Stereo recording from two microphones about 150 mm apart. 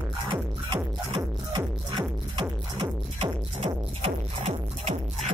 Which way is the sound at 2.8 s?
35° right (ahead or behind).